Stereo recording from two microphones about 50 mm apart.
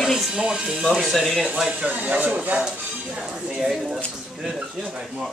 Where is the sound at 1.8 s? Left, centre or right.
Right.